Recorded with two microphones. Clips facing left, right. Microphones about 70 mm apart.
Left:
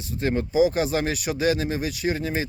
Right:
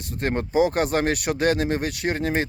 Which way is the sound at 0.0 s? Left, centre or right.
Right.